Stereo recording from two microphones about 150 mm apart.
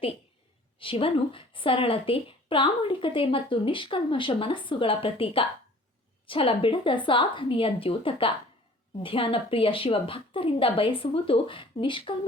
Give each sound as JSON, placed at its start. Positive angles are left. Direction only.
{"t": 0.8, "sound": "a woman's voice", "side_deg": 35}